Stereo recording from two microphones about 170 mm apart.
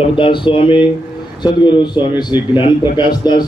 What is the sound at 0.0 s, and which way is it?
A man's voice, 30° left (ahead or behind).